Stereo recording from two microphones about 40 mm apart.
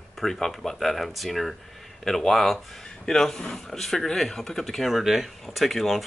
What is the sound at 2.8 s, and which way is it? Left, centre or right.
Speech, centre.